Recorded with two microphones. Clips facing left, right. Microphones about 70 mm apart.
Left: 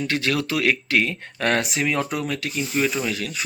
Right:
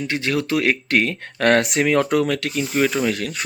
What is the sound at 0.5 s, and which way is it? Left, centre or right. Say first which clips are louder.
Speech: right 3 dB; right.